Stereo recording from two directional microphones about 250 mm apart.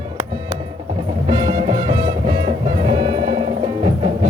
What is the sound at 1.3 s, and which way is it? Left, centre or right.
Music, centre.